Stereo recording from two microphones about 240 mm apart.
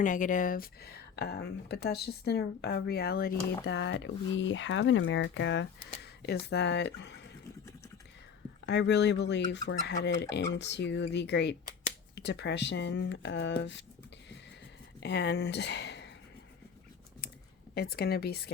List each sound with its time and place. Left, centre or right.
0.0 s speech: left
8.6 s speech: left
15.0 s speech: left
17.7 s speech: left